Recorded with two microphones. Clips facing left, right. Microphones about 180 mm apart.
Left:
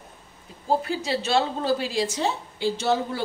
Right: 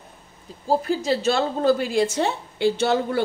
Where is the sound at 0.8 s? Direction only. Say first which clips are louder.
Right 5 dB; 45° right (ahead or behind).